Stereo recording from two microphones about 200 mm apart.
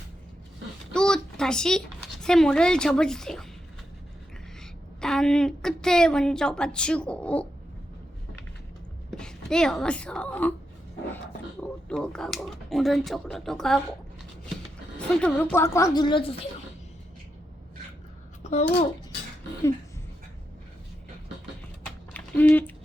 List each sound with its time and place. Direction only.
0.9 s a sound: 5° left (ahead or behind)
2.2 s speech: 5° left (ahead or behind)
4.6 s a woman's voice: 5° left (ahead or behind)
9.0 s speech: 5° left (ahead or behind)
11.9 s speech: 5° left (ahead or behind)
14.9 s speech: 5° left (ahead or behind); by 16.4 s 25° left (ahead or behind)
18.5 s a child's voice: 35° left (ahead or behind)
22.1 s typing: 10° left (ahead or behind)